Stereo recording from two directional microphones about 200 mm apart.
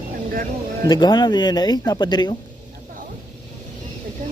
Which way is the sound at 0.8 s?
20° left (ahead or behind).